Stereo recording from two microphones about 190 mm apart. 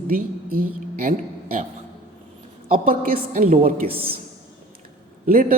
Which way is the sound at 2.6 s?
45° right (ahead or behind).